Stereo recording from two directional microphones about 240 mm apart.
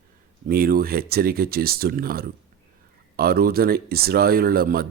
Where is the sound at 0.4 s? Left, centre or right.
Right.